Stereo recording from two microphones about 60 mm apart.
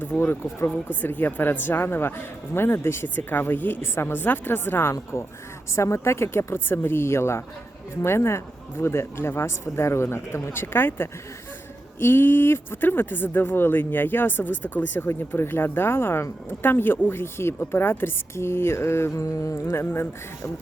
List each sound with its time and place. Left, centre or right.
0.2 s a woman's voice: left
0.9 s a woman's voice: left
19.1 s music: left
19.7 s a woman's voice: left